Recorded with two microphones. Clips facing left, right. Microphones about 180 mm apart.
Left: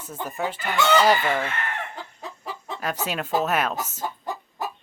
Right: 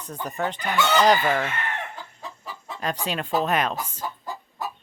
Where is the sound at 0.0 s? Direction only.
5° left (ahead or behind).